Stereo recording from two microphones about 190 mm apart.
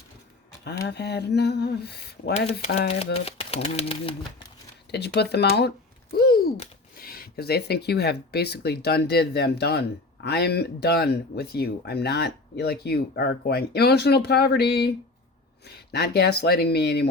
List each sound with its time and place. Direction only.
0.9 s speech: 60° left (ahead or behind)
3.0 s speech: 30° left (ahead or behind)
4.9 s speech: 60° left (ahead or behind)